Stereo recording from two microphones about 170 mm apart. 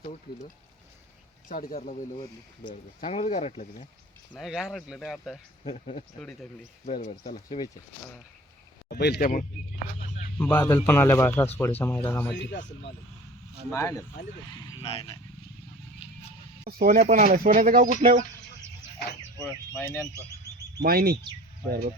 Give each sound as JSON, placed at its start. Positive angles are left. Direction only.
{"t": 1.5, "sound": "speech", "side_deg": 55}
{"t": 2.6, "sound": "speech", "side_deg": 35}
{"t": 4.4, "sound": "speech", "side_deg": 0}
{"t": 5.6, "sound": "speech", "side_deg": 40}
{"t": 8.9, "sound": "speech", "side_deg": 75}
{"t": 10.3, "sound": "speech", "side_deg": 10}
{"t": 13.7, "sound": "speech", "side_deg": 20}
{"t": 14.5, "sound": "speech", "side_deg": 30}
{"t": 16.6, "sound": "speech", "side_deg": -60}
{"t": 19.4, "sound": "speech", "side_deg": 15}
{"t": 20.8, "sound": "speech", "side_deg": -60}